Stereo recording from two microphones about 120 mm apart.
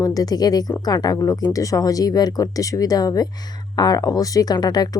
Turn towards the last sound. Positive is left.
turn(degrees=35)  # may be behind; listen again after turning